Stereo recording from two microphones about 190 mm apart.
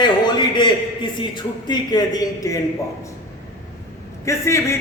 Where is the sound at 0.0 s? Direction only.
20° left (ahead or behind).